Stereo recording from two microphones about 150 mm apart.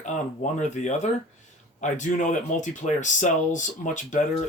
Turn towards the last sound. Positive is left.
turn(degrees=55)  # may be behind; listen again after turning